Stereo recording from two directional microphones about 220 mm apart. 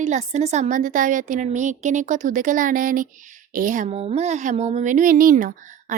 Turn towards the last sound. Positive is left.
turn(degrees=-40)  # may be behind; listen again after turning